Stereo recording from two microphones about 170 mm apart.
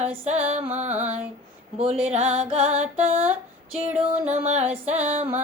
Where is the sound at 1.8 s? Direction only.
40° right (ahead or behind).